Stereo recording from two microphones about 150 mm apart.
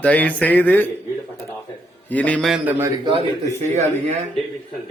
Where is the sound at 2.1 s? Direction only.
10° left (ahead or behind).